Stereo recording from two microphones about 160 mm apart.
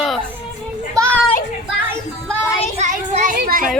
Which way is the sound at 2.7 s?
45° right (ahead or behind).